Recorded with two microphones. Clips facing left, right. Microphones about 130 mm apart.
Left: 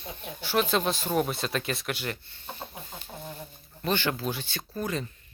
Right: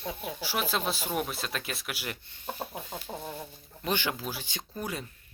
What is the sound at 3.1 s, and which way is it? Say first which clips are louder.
Chicken: right 4 dB; 40° right (ahead or behind).